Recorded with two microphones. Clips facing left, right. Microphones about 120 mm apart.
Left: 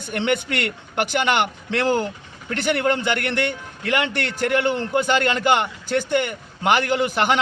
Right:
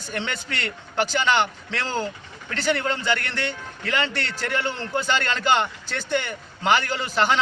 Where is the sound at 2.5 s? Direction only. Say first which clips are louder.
Left 4 dB; 55° left (ahead or behind).